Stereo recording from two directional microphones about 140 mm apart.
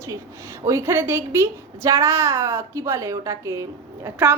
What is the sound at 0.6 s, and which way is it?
A woman's voice, 20° right (ahead or behind).